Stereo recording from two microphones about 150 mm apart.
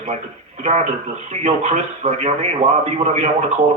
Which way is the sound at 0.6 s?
45° right (ahead or behind).